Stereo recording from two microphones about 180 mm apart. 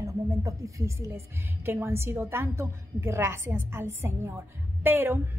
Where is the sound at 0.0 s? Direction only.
15° right (ahead or behind).